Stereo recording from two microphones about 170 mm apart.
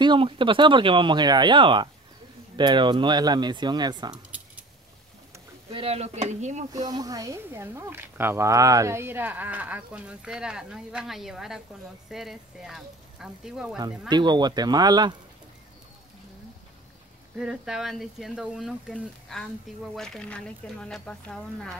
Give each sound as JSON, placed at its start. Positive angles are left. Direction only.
{"t": 0.0, "sound": "speech", "side_deg": -30}
{"t": 5.7, "sound": "speech", "side_deg": -35}
{"t": 6.7, "sound": "speech", "side_deg": -25}
{"t": 13.7, "sound": "speech", "side_deg": -25}
{"t": 17.4, "sound": "speech", "side_deg": -5}